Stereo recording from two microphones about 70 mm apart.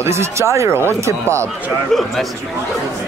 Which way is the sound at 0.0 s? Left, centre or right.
Right.